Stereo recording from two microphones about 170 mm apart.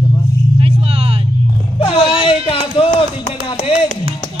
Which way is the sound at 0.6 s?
35° right (ahead or behind).